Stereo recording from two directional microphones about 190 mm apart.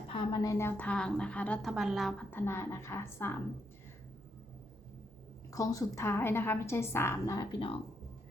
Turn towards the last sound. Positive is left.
turn(degrees=25)  # may be behind; listen again after turning